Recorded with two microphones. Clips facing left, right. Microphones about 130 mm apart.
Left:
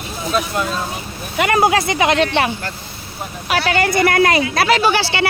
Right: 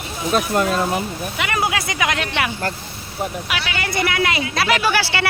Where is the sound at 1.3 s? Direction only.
45° left (ahead or behind); by 2.5 s 30° left (ahead or behind).